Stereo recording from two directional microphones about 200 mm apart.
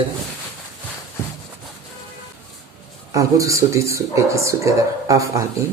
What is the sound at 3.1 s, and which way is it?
Speech, 15° right (ahead or behind).